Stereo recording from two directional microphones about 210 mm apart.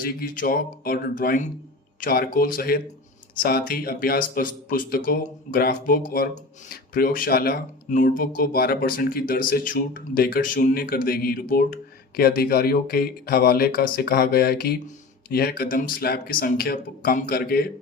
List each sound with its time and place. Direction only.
0.0 s speech: 45° left (ahead or behind)